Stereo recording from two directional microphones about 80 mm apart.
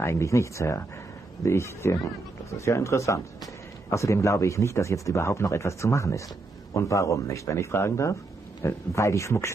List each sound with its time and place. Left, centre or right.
0.0 s speech: left